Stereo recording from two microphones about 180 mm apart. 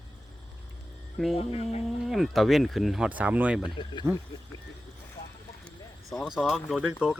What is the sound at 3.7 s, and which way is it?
Speech, 25° left (ahead or behind).